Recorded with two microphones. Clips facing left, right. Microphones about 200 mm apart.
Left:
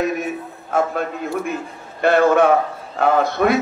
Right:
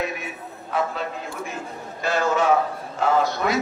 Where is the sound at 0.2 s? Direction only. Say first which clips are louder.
Left 9 dB; 50° left (ahead or behind).